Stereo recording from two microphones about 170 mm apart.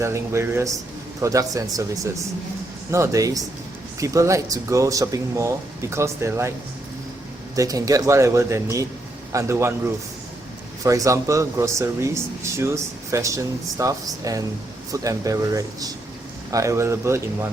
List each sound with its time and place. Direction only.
0.0 s speech: 15° right (ahead or behind)
2.9 s speech: 15° right (ahead or behind)
7.5 s speech: 20° right (ahead or behind)